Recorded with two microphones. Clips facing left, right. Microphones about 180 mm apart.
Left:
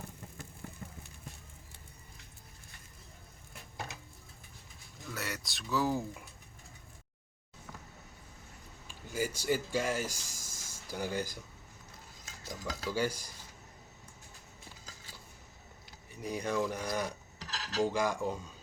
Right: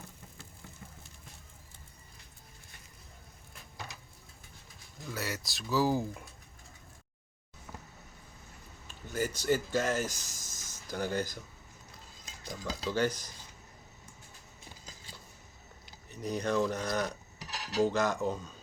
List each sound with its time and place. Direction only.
5.1 s speech: centre (ahead or behind)
8.9 s speech: 10° left (ahead or behind)
12.2 s a sound: 20° right (ahead or behind)
12.9 s speech: 10° left (ahead or behind)
16.2 s speech: 10° left (ahead or behind)
17.5 s cutlery: 15° right (ahead or behind)
17.8 s speech: 10° left (ahead or behind)